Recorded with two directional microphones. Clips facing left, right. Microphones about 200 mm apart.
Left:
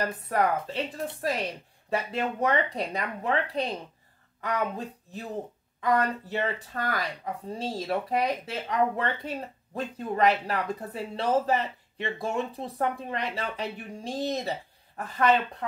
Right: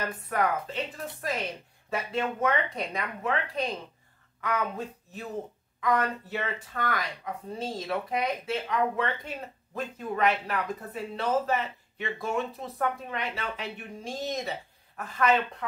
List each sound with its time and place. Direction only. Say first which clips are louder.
0.0 s speech: left 2 dB; 35° left (ahead or behind)